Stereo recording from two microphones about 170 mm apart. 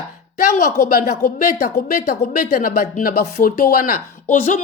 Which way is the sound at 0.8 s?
55° left (ahead or behind).